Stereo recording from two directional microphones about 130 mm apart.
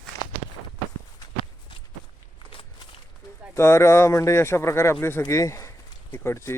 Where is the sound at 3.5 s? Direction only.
20° left (ahead or behind).